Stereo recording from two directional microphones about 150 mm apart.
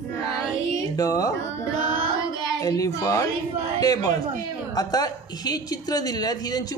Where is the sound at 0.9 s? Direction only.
25° left (ahead or behind).